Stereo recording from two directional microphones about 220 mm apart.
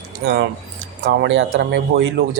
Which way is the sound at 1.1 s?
55° right (ahead or behind).